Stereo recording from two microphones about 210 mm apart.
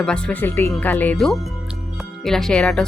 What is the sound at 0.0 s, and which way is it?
Speech, 5° left (ahead or behind).